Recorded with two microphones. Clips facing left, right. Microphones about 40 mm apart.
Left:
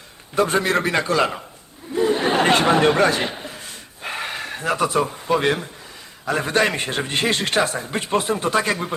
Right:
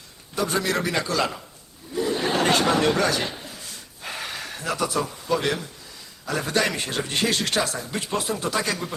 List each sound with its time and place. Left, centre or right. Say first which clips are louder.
0.3 s a man's voice: left 5 dB; left
2.0 s a sound: left 5 dB; left
6.2 s a man's voice: left 4 dB; left